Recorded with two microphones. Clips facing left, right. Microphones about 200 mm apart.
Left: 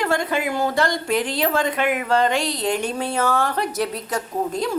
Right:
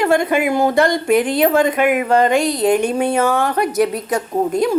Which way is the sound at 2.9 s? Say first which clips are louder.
Right 6 dB; 15° right (ahead or behind).